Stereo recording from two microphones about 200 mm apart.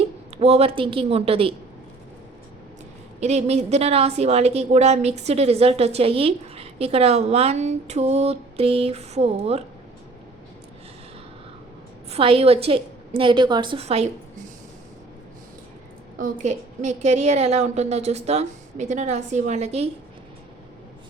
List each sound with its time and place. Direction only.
0.3 s a woman's voice: 30° right (ahead or behind)
3.2 s a woman's voice: 35° right (ahead or behind)
12.1 s a woman's voice: 30° right (ahead or behind)
16.1 s a woman's voice: 40° right (ahead or behind)